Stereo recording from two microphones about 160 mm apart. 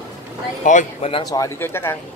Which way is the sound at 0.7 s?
50° left (ahead or behind).